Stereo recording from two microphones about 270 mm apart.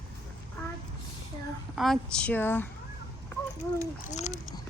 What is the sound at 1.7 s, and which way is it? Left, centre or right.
Speech, centre.